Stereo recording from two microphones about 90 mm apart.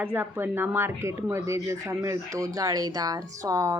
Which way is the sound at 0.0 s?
20° right (ahead or behind).